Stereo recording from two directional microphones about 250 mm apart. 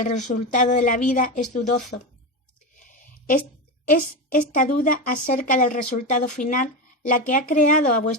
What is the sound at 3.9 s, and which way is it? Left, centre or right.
Speech, left.